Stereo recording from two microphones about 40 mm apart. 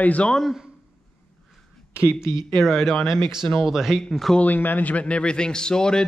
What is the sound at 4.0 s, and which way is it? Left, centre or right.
Speech, centre.